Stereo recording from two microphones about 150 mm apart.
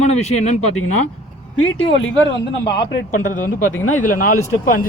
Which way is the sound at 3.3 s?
60° left (ahead or behind).